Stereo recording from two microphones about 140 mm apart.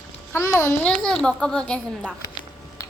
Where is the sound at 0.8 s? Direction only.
5° left (ahead or behind).